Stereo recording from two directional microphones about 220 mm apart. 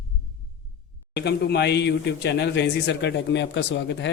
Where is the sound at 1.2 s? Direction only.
50° left (ahead or behind).